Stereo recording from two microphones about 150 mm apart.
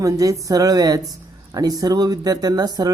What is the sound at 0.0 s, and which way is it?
Speech, 25° right (ahead or behind).